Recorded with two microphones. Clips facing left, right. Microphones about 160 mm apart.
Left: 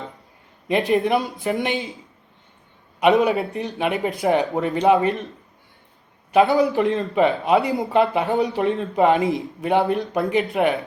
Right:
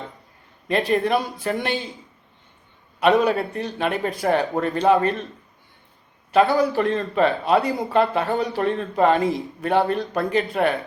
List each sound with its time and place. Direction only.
0.7 s speech: 20° left (ahead or behind)
3.0 s speech: 20° left (ahead or behind)
6.3 s a man's voice: 20° left (ahead or behind)